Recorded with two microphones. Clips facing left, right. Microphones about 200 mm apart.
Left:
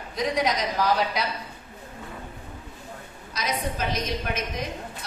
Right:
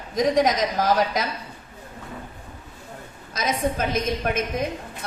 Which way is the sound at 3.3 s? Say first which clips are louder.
Right 5 dB; 50° right (ahead or behind).